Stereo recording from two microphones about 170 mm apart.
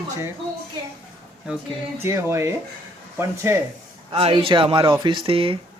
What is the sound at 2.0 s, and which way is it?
Speech, 15° right (ahead or behind).